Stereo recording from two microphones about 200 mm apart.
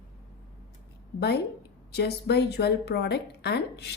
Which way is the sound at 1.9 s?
55° left (ahead or behind).